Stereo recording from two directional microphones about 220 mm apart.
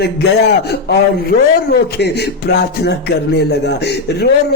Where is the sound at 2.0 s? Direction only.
50° left (ahead or behind).